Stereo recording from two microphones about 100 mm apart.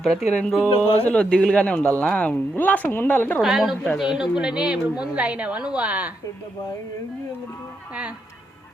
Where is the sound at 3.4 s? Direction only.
Centre (ahead or behind).